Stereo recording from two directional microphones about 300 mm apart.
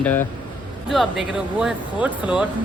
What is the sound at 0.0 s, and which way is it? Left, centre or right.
Speech, centre.